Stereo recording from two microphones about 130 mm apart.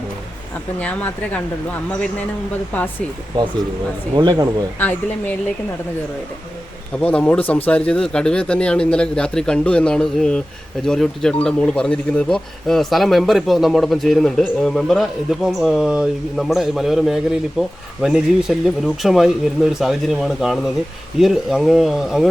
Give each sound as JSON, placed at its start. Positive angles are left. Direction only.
{"t": 0.8, "sound": "speech", "side_deg": 10}
{"t": 4.2, "sound": "speech", "side_deg": -30}
{"t": 4.8, "sound": "speech", "side_deg": 15}
{"t": 6.9, "sound": "a man's voice", "side_deg": 10}